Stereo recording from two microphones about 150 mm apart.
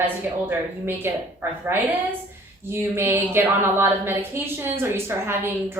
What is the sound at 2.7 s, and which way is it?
A woman's voice, 15° right (ahead or behind).